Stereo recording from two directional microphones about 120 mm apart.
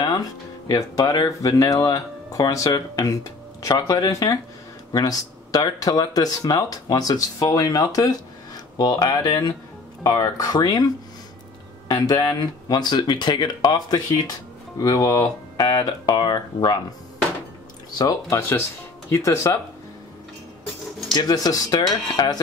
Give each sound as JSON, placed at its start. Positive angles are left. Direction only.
{"t": 0.0, "sound": "speech", "side_deg": 30}
{"t": 11.9, "sound": "speech", "side_deg": 35}
{"t": 19.0, "sound": "speech", "side_deg": 25}
{"t": 21.1, "sound": "speech", "side_deg": 35}